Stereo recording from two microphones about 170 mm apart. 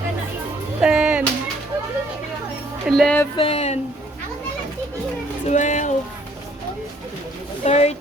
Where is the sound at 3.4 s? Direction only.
35° left (ahead or behind).